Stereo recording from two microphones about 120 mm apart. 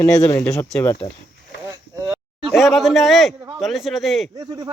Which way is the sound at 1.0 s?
25° left (ahead or behind).